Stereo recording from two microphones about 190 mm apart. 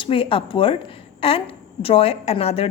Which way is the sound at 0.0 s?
30° left (ahead or behind).